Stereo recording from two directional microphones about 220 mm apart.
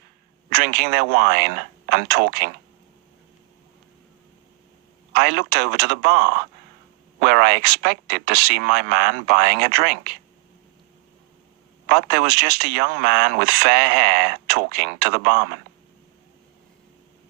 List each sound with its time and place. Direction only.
0.5 s speech: 45° right (ahead or behind)
5.1 s speech: 45° right (ahead or behind)
11.9 s speech: 45° right (ahead or behind)